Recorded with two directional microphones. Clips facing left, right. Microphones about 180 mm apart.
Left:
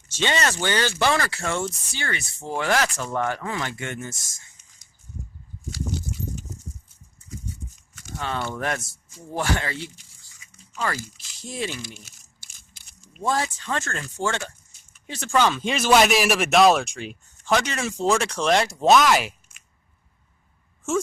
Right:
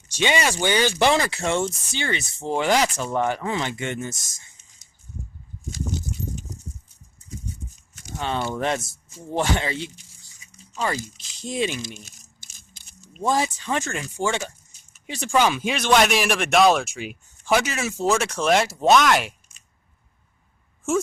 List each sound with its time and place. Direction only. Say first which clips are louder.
0.1 s speech: right 2 dB; 15° right (ahead or behind)
8.2 s speech: right 3 dB; 20° right (ahead or behind)
15.7 s speech: left 2 dB; 5° left (ahead or behind)